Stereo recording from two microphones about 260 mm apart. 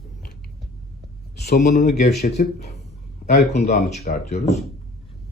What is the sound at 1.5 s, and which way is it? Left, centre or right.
Speech, left.